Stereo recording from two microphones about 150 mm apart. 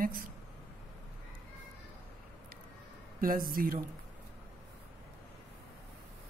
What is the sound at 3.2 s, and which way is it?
Speech, 75° right (ahead or behind).